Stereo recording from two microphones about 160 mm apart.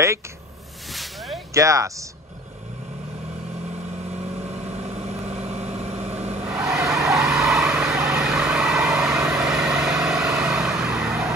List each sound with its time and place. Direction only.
0.9 s a sound: centre (ahead or behind)
1.5 s speech: 20° right (ahead or behind)
4.9 s vehicle: 40° right (ahead or behind)
6.4 s vehicle: 5° right (ahead or behind)